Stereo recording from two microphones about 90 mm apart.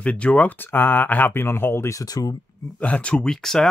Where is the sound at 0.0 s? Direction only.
15° left (ahead or behind); by 2.3 s 45° left (ahead or behind).